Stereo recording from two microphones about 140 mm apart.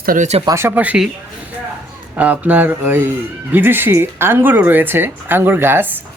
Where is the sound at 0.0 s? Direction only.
90° right.